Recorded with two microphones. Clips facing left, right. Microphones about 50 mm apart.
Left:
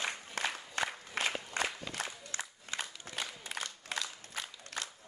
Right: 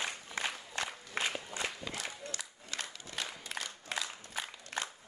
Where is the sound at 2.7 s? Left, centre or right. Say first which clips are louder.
Left 2 dB; left.